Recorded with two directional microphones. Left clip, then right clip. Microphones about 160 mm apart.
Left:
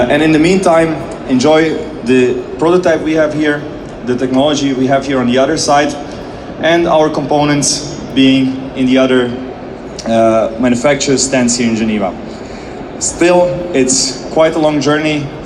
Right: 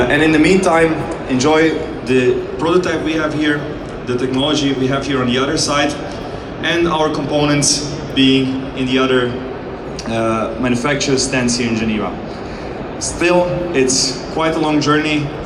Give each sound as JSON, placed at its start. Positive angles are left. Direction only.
{"t": 0.1, "sound": "a man's voice", "side_deg": 50}
{"t": 13.1, "sound": "a man's voice", "side_deg": 45}